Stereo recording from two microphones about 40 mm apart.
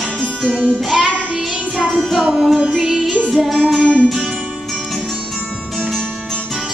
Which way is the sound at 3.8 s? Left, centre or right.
Left.